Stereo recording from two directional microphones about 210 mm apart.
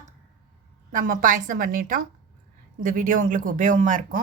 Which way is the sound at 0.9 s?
40° right (ahead or behind).